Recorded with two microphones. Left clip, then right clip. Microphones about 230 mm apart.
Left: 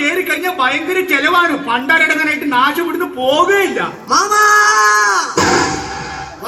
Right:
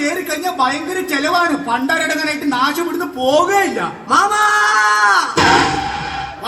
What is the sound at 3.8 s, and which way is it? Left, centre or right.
Music, right.